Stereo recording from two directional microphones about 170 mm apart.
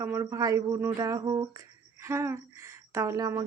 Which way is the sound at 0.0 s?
15° right (ahead or behind).